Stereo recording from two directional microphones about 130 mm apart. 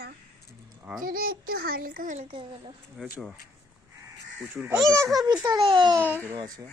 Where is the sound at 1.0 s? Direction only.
90° right.